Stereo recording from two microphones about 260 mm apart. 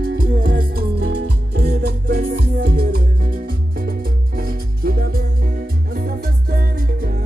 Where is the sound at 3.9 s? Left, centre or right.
Right.